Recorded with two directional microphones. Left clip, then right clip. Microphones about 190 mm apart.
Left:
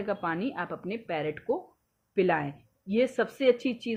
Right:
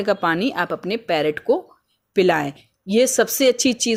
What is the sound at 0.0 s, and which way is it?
Speech, 65° right (ahead or behind).